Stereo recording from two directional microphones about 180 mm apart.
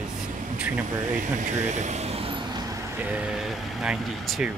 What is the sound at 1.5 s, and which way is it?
Speech, 40° right (ahead or behind).